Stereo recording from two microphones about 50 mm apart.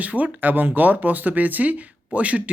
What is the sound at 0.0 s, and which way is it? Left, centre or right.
Speech, right.